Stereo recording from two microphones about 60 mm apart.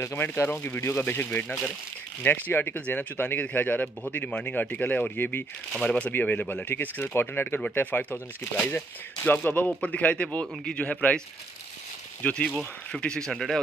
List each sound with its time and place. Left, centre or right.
0.0 s speech: left
0.5 s speech: left
0.7 s speech: left
2.2 s speech: left
4.3 s speech: centre
5.7 s speech: centre
6.1 s speech: left
12.2 s speech: left
12.4 s speech: centre